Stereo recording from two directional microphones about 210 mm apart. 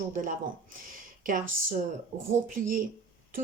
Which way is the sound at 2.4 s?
40° right (ahead or behind).